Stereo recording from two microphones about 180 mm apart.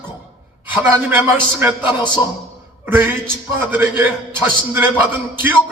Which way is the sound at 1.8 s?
25° left (ahead or behind).